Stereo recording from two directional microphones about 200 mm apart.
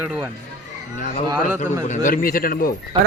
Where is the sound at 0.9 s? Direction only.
40° left (ahead or behind).